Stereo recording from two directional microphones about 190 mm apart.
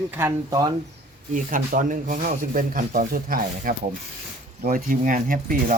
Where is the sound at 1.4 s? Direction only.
45° right (ahead or behind).